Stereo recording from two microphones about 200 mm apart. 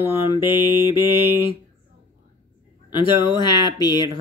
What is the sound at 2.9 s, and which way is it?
Speech, 20° left (ahead or behind).